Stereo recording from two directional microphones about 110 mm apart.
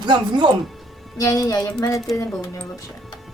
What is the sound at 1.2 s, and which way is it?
Speech, 30° left (ahead or behind).